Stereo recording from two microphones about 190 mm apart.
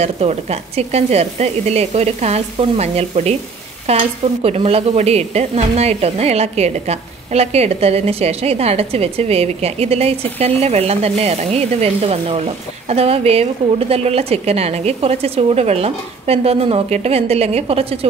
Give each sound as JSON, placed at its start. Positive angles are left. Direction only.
{"t": 0.0, "sound": "speech", "side_deg": -35}